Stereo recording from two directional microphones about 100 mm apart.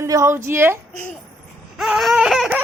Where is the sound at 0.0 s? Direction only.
30° right (ahead or behind).